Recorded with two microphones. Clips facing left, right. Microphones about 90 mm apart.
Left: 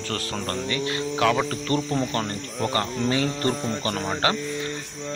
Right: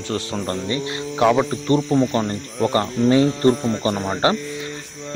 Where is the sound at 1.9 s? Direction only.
5° right (ahead or behind).